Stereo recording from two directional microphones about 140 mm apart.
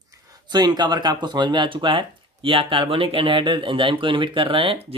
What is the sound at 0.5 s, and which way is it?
Speech, 30° right (ahead or behind).